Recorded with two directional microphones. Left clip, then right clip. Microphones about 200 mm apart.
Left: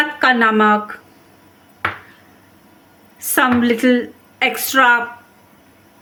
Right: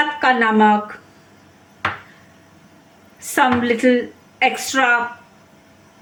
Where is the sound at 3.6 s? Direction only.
20° left (ahead or behind).